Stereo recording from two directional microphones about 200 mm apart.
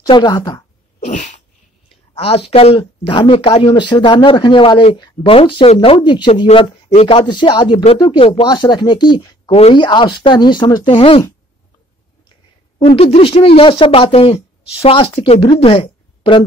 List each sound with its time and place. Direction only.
0.0 s speech: 20° left (ahead or behind)
1.0 s sneeze: 35° left (ahead or behind)
2.1 s speech: 30° left (ahead or behind)
12.7 s speech: 25° left (ahead or behind)